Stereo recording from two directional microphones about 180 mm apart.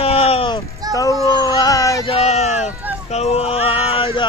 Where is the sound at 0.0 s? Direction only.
35° left (ahead or behind).